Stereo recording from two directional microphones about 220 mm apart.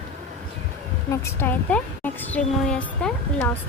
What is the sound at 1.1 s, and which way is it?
Speech, 10° left (ahead or behind).